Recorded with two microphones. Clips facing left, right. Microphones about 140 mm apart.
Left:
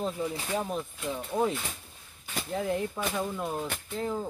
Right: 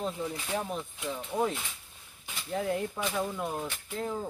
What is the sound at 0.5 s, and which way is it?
Speech, 5° left (ahead or behind).